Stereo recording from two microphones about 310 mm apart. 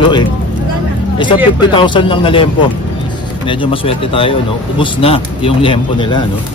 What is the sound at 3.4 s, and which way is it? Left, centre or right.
Speech, centre.